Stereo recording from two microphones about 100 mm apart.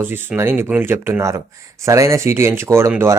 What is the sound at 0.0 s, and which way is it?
A man's voice, 20° right (ahead or behind).